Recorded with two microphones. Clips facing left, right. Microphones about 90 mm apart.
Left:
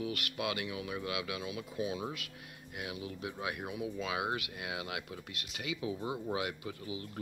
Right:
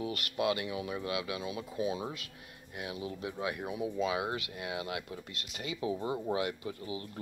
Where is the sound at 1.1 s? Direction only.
35° right (ahead or behind).